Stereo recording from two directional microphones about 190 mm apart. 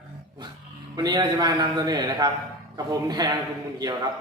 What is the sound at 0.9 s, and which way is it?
A man's voice, 20° right (ahead or behind).